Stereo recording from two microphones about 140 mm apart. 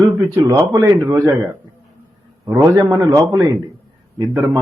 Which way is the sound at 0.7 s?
20° right (ahead or behind).